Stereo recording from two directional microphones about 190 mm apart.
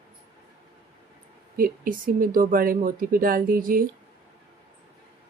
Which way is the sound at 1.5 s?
50° right (ahead or behind).